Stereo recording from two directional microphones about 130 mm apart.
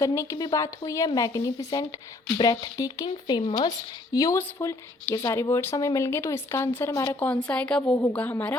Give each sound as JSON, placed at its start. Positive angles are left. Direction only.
{"t": 0.0, "sound": "speech", "side_deg": 25}
{"t": 7.2, "sound": "speech", "side_deg": 10}